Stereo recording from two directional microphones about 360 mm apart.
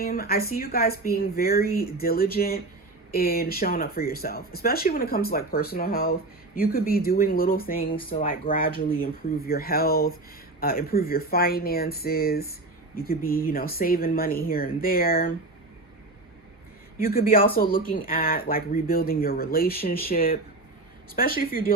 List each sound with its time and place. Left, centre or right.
0.0 s speech: left
17.0 s speech: left